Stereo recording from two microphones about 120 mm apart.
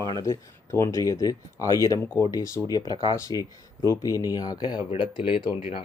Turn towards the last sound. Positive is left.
turn(degrees=50)  # may be behind; listen again after turning